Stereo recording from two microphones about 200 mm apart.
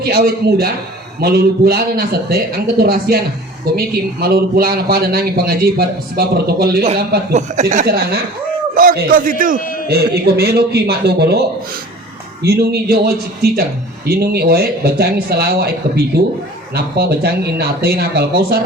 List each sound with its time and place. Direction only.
0.0 s speech: 50° right (ahead or behind)
7.3 s speech: 40° right (ahead or behind)
9.6 s a sound: 45° left (ahead or behind)
9.9 s speech: 50° right (ahead or behind)